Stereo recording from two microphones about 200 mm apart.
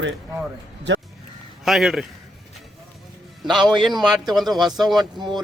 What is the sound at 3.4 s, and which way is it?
Speech, centre (ahead or behind).